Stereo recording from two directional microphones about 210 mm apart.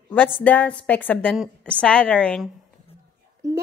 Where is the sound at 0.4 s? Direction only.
5° left (ahead or behind).